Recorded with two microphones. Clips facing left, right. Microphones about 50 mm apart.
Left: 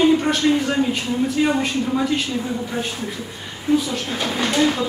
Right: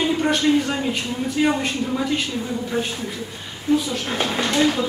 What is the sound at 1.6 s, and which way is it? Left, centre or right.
Speech, centre.